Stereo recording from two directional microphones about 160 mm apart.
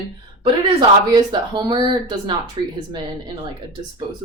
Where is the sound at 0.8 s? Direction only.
25° right (ahead or behind).